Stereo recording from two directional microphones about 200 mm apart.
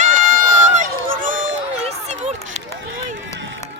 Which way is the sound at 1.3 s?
70° right (ahead or behind).